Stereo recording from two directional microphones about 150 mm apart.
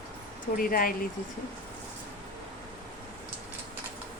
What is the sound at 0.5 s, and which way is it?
Speech, 75° left (ahead or behind).